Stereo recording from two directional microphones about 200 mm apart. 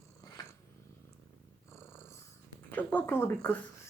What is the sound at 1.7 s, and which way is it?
Purr, 10° left (ahead or behind).